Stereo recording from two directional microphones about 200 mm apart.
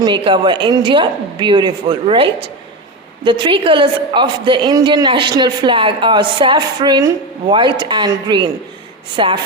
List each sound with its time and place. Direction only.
0.0 s a woman's voice: 25° right (ahead or behind)